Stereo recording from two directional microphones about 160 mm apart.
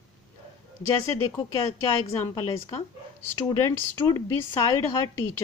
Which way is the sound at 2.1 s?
20° left (ahead or behind).